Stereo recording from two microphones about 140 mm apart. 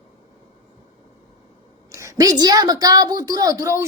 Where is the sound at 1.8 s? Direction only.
20° right (ahead or behind).